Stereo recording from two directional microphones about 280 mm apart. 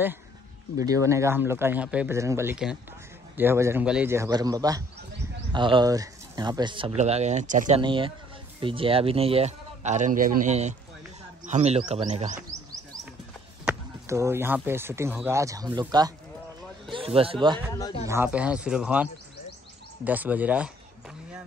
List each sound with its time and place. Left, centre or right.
0.7 s speech: centre
12.4 s a sound: centre
13.7 s a man's voice: centre
17.7 s speech: centre
18.0 s speech: centre
20.1 s speech: centre